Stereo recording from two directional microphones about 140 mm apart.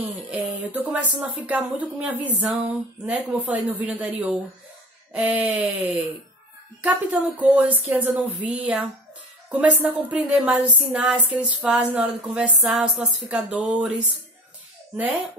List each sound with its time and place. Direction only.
0.3 s speech: 10° right (ahead or behind)